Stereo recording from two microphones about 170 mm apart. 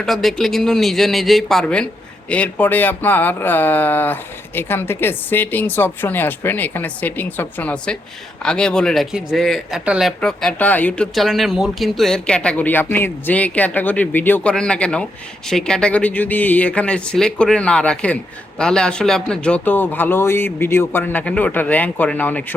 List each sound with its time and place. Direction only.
0.0 s speech: centre (ahead or behind)